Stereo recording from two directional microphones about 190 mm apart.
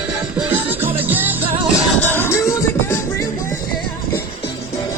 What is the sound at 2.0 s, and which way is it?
Music, 10° left (ahead or behind).